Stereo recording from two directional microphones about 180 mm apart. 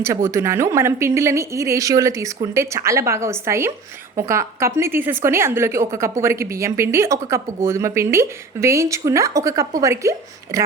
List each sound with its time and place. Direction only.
0.3 s a woman's voice: 15° right (ahead or behind)